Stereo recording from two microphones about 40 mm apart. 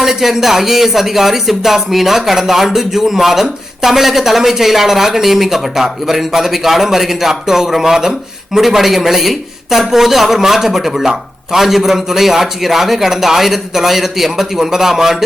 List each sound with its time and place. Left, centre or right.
0.0 s speech: centre